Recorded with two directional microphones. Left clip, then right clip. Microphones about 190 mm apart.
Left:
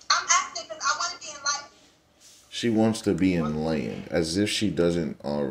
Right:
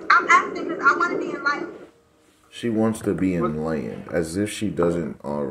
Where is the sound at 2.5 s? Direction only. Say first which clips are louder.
Right 1 dB; 20° left (ahead or behind).